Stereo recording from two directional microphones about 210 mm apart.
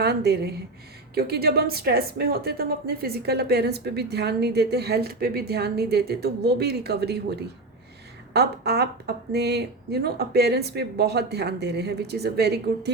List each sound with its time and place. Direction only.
0.0 s a woman's voice: 50° right (ahead or behind)